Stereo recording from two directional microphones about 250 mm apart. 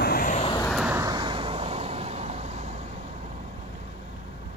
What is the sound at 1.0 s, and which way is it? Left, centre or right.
Vehicle, centre.